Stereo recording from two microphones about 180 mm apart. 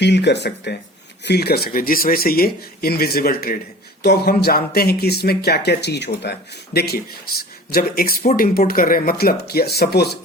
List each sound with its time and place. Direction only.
0.0 s speech: 70° left (ahead or behind)
6.7 s speech: 60° left (ahead or behind)